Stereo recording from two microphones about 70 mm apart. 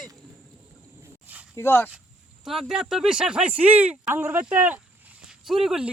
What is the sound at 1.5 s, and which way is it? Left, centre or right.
Speech, left.